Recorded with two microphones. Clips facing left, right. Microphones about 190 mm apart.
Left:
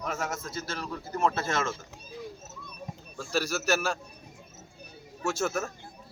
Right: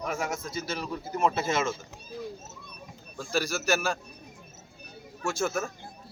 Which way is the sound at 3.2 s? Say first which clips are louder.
Even; 10° right (ahead or behind).